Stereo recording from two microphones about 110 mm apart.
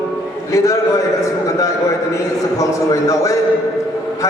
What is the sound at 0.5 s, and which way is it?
Speech, 30° left (ahead or behind).